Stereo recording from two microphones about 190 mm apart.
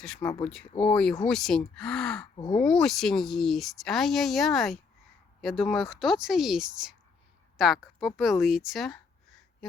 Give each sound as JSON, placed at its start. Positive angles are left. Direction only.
{"t": 0.0, "sound": "speech", "side_deg": 5}
{"t": 2.3, "sound": "speech", "side_deg": 25}
{"t": 2.6, "sound": "a woman's voice", "side_deg": 5}